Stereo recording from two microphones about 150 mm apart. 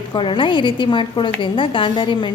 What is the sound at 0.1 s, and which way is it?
A woman's voice, 35° left (ahead or behind).